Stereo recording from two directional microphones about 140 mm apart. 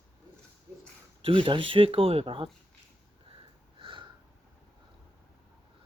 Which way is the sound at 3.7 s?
35° right (ahead or behind).